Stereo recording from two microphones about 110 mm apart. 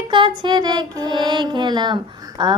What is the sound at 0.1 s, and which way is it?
Music, 45° right (ahead or behind).